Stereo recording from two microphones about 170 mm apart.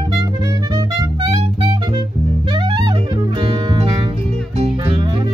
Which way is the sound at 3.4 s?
30° right (ahead or behind).